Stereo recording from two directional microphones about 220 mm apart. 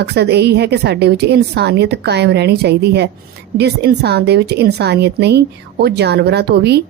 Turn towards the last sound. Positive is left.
turn(degrees=-50)  # may be behind; listen again after turning